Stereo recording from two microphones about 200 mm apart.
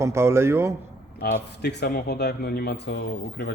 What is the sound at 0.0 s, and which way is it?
Speech, 15° right (ahead or behind).